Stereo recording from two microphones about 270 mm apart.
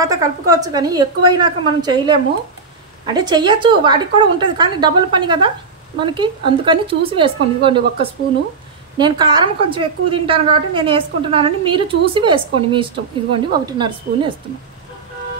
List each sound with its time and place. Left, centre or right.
0.0 s a woman's voice: centre
8.9 s a woman's voice: centre